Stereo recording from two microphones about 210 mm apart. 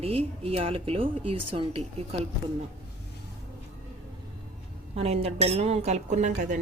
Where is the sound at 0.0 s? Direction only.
30° right (ahead or behind).